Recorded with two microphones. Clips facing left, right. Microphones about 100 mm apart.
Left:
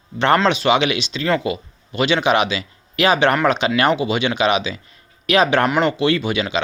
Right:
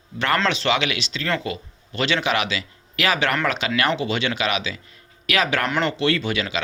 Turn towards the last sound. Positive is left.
turn(degrees=20)  # may be behind; listen again after turning